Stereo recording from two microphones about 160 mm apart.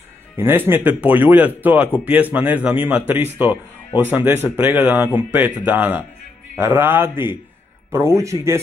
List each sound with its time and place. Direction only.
0.4 s speech: 15° right (ahead or behind)